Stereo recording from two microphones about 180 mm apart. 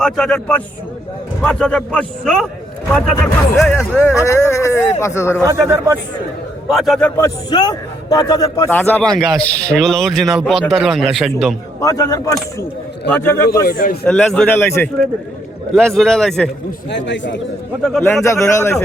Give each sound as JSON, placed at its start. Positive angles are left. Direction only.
{"t": 0.0, "sound": "a man's voice", "side_deg": 5}
{"t": 5.5, "sound": "speech", "side_deg": -15}
{"t": 6.7, "sound": "a man's voice", "side_deg": 0}
{"t": 7.2, "sound": "a man's voice", "side_deg": 20}
{"t": 11.8, "sound": "speech", "side_deg": 20}
{"t": 13.7, "sound": "a man's voice", "side_deg": 55}
{"t": 14.0, "sound": "a man's voice", "side_deg": 5}
{"t": 16.9, "sound": "speech", "side_deg": 80}
{"t": 17.9, "sound": "a man's voice", "side_deg": 5}
{"t": 18.3, "sound": "speech", "side_deg": 15}